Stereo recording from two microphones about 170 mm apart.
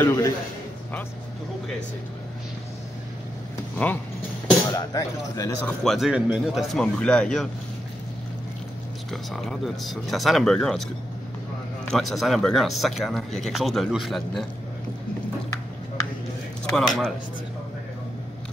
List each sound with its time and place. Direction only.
0.0 s a sound: 15° left (ahead or behind)
3.7 s speech: 10° left (ahead or behind)
4.7 s speech: 20° left (ahead or behind)
5.6 s speech: centre (ahead or behind)
9.1 s speech: centre (ahead or behind)
11.9 s speech: centre (ahead or behind)
16.6 s speech: 5° left (ahead or behind)